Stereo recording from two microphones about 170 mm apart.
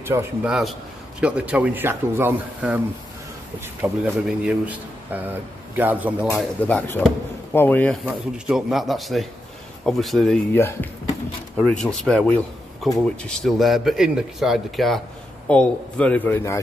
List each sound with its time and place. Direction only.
0.0 s a man's voice: 15° right (ahead or behind)
0.5 s a man's voice: centre (ahead or behind)
7.5 s a man's voice: 10° left (ahead or behind)
8.0 s speech: 5° right (ahead or behind)
10.5 s a man's voice: 15° left (ahead or behind)
11.5 s a man's voice: 5° left (ahead or behind)